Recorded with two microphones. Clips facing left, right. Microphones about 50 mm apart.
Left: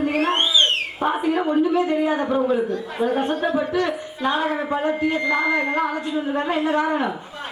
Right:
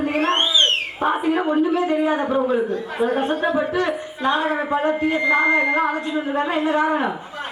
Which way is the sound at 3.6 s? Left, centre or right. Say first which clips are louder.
Right 1 dB; right.